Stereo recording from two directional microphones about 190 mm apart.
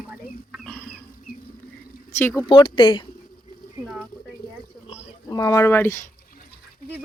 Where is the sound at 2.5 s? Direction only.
25° left (ahead or behind).